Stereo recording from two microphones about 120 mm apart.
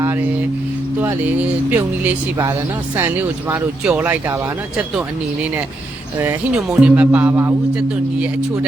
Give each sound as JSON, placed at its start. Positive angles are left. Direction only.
{"t": 1.4, "sound": "speech", "side_deg": -15}